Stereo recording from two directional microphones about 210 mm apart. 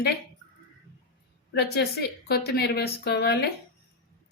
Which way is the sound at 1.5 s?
50° left (ahead or behind).